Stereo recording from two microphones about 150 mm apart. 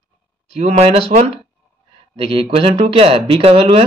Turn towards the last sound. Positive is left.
turn(degrees=-40)  # may be behind; listen again after turning